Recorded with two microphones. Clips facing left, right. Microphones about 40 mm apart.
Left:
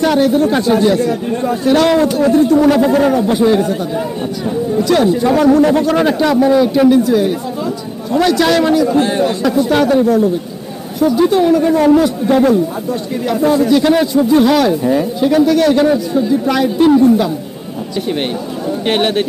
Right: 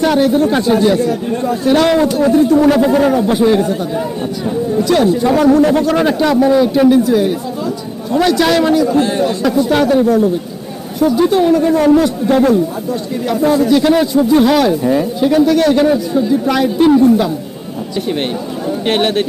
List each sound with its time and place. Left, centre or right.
0.0 s a man's voice: centre
8.9 s a man's voice: centre
9.6 s a man's voice: centre
13.4 s a man's voice: centre
18.9 s a man's voice: centre